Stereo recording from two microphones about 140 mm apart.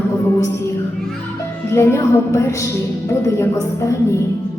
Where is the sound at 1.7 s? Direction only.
20° left (ahead or behind).